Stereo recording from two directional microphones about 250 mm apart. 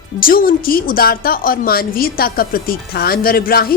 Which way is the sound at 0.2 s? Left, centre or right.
Left.